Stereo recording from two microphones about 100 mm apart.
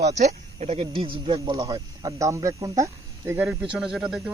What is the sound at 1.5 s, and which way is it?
Speech, 40° right (ahead or behind).